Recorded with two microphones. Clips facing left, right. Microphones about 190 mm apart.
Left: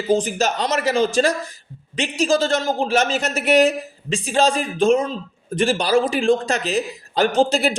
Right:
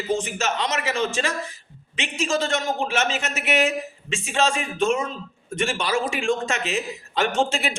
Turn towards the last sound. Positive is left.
turn(degrees=35)  # may be behind; listen again after turning